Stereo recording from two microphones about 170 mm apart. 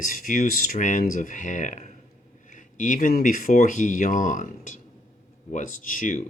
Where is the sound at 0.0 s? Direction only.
55° left (ahead or behind).